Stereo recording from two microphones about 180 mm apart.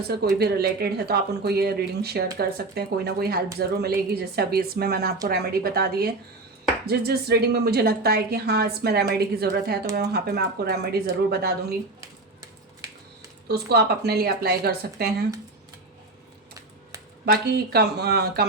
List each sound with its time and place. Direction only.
0.3 s a woman's voice: 60° right (ahead or behind)
13.5 s a woman's voice: 60° right (ahead or behind)
17.2 s a woman's voice: 60° right (ahead or behind)